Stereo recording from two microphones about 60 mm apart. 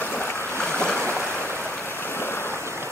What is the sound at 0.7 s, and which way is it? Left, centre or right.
Boat, left.